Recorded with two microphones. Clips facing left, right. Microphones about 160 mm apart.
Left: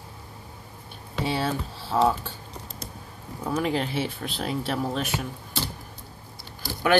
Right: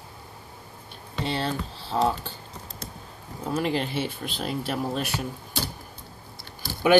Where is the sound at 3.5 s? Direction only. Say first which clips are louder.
Even; centre (ahead or behind).